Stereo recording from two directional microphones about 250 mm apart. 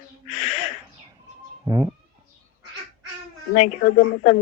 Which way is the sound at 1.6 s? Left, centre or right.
Centre.